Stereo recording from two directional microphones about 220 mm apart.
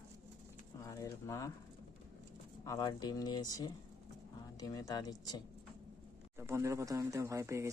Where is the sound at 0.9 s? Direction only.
15° left (ahead or behind).